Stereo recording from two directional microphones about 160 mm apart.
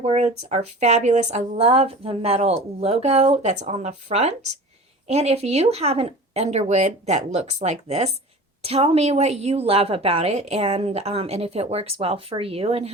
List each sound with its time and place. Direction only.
0.0 s a woman's voice: 40° right (ahead or behind)